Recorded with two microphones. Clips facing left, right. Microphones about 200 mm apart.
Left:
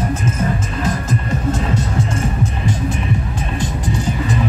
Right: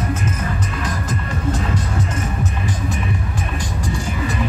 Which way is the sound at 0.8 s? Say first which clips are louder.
Left 4 dB; 25° left (ahead or behind).